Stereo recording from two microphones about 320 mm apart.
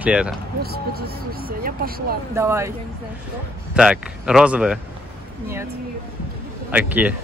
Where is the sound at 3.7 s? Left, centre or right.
Centre.